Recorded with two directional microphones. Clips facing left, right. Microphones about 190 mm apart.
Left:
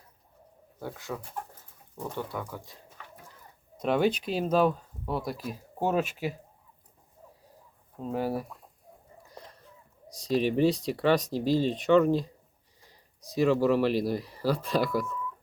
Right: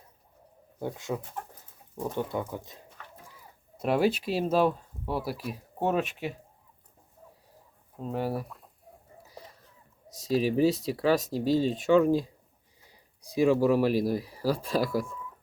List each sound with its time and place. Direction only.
0.8 s speech: 20° right (ahead or behind)
3.3 s speech: 5° right (ahead or behind)
7.9 s speech: centre (ahead or behind)
9.2 s a sound: 5° right (ahead or behind)
10.2 s speech: 5° right (ahead or behind)
13.3 s speech: 15° right (ahead or behind)